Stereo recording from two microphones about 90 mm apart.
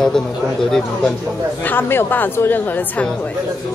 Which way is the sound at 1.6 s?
25° left (ahead or behind).